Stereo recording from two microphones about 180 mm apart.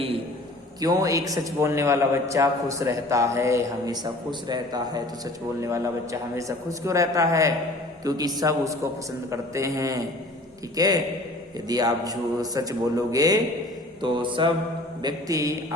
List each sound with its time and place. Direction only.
0.8 s a man's voice: 20° right (ahead or behind)